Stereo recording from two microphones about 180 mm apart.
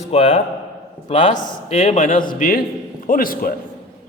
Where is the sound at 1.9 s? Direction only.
50° left (ahead or behind).